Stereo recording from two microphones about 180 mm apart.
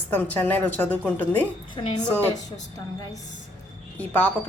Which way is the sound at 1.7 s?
25° left (ahead or behind).